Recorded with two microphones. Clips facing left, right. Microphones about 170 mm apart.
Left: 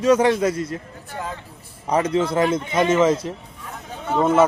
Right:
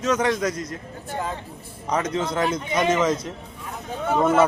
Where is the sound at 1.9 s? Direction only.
30° left (ahead or behind).